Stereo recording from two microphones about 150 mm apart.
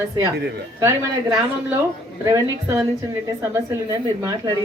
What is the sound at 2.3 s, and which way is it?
Speech, 20° right (ahead or behind).